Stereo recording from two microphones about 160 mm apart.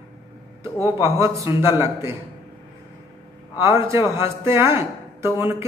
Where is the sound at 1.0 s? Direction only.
20° right (ahead or behind).